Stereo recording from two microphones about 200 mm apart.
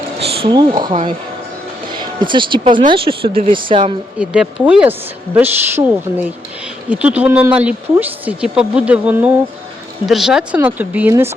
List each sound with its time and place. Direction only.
0.4 s speech: 25° right (ahead or behind)
4.2 s speech: 5° right (ahead or behind)